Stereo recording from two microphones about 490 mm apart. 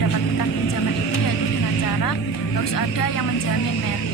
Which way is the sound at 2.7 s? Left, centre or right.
Left.